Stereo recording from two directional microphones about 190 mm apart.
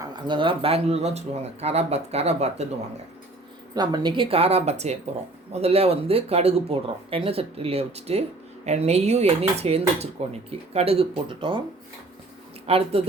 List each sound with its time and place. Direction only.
0.0 s dishes: 25° right (ahead or behind)
3.8 s dishes: 25° right (ahead or behind)
12.6 s dishes: 30° right (ahead or behind)